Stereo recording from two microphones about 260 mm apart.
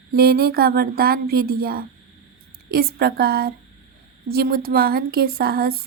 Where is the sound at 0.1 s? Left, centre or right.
Right.